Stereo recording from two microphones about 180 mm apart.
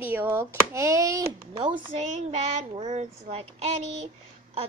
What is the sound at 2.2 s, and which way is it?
Child singing, 35° right (ahead or behind).